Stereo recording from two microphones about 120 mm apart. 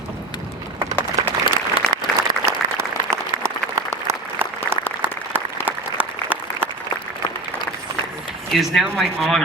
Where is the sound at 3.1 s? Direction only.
25° right (ahead or behind).